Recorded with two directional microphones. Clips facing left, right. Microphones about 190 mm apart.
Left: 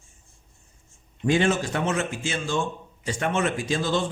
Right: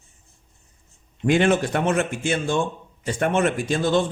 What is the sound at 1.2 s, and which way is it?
A man's voice, 60° right (ahead or behind).